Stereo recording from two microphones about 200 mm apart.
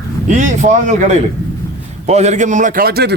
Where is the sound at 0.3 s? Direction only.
40° right (ahead or behind).